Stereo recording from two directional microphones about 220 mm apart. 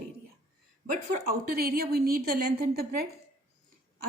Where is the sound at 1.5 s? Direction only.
45° right (ahead or behind).